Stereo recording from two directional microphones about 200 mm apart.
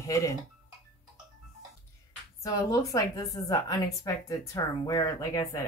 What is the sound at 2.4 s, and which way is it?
A woman's voice, 15° left (ahead or behind).